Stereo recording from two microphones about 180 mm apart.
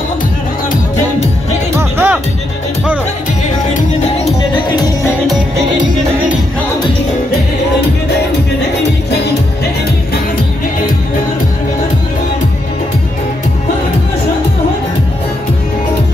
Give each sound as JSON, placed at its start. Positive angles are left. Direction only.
{"t": 1.8, "sound": "music", "side_deg": -10}
{"t": 3.4, "sound": "music", "side_deg": 40}
{"t": 4.6, "sound": "music", "side_deg": 20}